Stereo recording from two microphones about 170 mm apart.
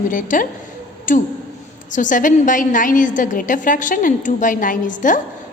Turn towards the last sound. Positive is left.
turn(degrees=50)  # may be behind; listen again after turning